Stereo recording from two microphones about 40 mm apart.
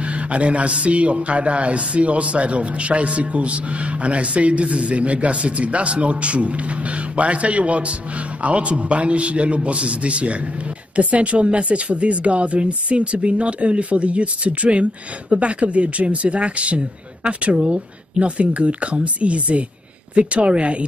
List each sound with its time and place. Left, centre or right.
0.0 s speech: right